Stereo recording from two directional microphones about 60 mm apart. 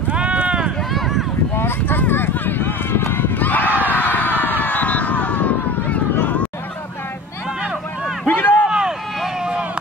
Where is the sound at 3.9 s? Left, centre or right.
Left.